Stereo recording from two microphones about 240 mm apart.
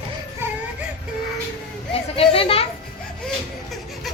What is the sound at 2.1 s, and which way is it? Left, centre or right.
Speech, left.